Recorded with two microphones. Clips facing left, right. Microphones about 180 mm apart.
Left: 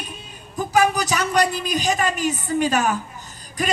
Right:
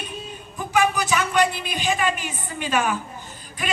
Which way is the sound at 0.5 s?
40° left (ahead or behind).